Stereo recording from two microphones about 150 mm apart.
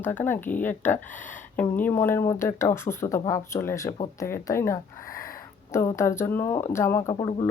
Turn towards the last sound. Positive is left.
turn(degrees=30)  # may be behind; listen again after turning